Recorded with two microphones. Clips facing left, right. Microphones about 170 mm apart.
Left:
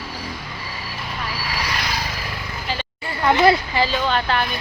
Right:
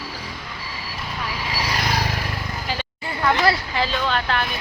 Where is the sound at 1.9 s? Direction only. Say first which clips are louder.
Right 4 dB; 55° right (ahead or behind).